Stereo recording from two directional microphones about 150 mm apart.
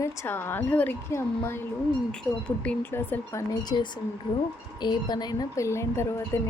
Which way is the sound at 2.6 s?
15° left (ahead or behind).